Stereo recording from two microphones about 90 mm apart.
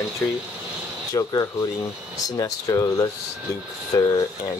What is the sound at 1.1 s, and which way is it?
Speech, 45° left (ahead or behind).